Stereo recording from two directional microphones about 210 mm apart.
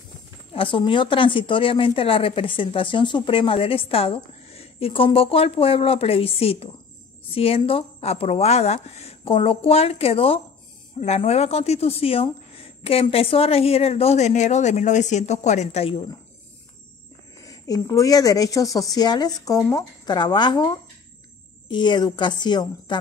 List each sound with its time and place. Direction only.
0.6 s a woman's voice: 25° left (ahead or behind)
17.4 s a woman's voice: 15° left (ahead or behind)